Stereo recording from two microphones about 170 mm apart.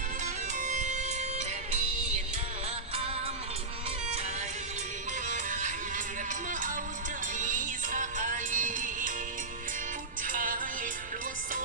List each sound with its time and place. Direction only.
0.6 s music: 45° right (ahead or behind)
5.3 s music: 45° right (ahead or behind)
10.2 s music: 55° right (ahead or behind)